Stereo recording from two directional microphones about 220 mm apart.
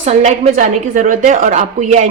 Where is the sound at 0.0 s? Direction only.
30° right (ahead or behind).